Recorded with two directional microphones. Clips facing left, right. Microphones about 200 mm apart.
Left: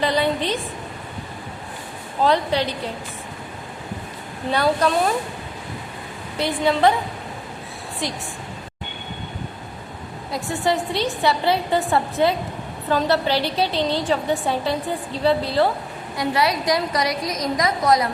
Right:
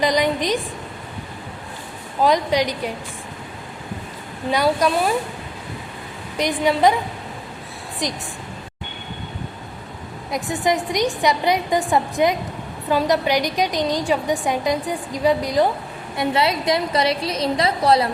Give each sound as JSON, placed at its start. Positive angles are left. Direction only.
{"t": 0.0, "sound": "a woman's voice", "side_deg": -15}
{"t": 2.2, "sound": "a woman's voice", "side_deg": -15}
{"t": 4.5, "sound": "a woman's voice", "side_deg": -10}
{"t": 6.3, "sound": "a woman's voice", "side_deg": -15}
{"t": 8.0, "sound": "a woman's voice", "side_deg": -15}
{"t": 10.3, "sound": "a woman's voice", "side_deg": -15}